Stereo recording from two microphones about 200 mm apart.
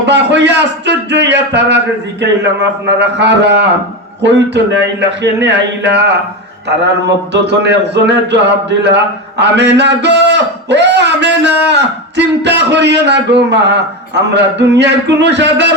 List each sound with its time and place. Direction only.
0.0 s a man's voice: 60° right (ahead or behind)
7.4 s a man's voice: 60° right (ahead or behind)
9.4 s a man's voice: 60° right (ahead or behind)